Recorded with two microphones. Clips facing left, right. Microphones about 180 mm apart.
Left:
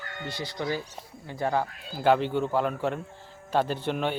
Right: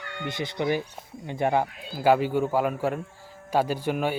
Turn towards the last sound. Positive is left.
turn(degrees=-5)  # may be behind; listen again after turning